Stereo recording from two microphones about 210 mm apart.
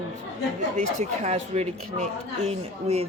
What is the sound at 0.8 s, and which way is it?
Speech, 35° right (ahead or behind).